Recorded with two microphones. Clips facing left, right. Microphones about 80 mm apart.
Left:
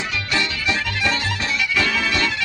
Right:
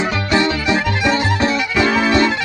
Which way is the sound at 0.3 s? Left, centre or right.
Right.